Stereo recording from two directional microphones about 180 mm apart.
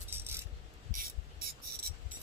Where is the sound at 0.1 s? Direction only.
10° right (ahead or behind).